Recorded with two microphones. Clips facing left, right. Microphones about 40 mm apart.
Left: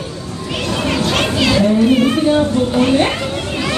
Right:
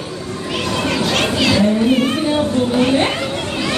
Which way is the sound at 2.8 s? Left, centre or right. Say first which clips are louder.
Left 2 dB; centre.